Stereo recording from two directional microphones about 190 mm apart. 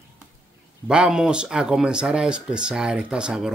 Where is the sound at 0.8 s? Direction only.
5° right (ahead or behind).